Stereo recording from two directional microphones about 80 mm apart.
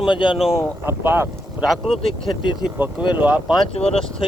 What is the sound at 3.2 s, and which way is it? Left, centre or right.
Speech, centre.